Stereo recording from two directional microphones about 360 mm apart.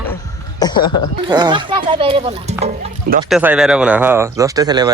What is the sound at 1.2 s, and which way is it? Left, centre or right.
A man's voice, centre.